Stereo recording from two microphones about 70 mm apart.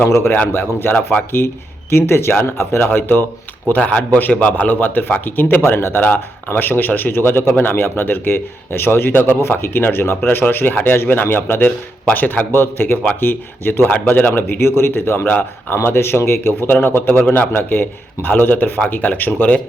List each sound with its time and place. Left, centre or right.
0.0 s speech: left
17.5 s speech: left